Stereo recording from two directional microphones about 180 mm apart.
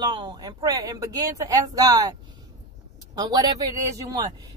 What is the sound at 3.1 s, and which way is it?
Speech, 20° right (ahead or behind).